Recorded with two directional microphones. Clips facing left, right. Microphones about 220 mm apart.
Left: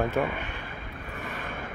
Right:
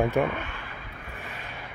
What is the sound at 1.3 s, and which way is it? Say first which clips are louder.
Vehicle: left 5 dB; 50° left (ahead or behind).